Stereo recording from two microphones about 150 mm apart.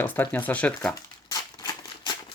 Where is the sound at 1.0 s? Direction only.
25° left (ahead or behind).